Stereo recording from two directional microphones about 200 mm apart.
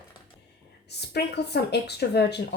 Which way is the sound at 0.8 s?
55° left (ahead or behind).